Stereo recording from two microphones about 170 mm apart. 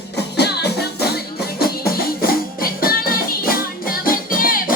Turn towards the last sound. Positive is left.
turn(degrees=55)  # may be behind; listen again after turning